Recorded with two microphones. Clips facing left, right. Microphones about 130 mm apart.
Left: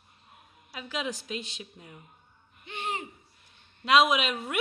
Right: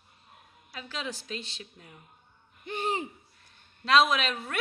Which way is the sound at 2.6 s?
40° right (ahead or behind).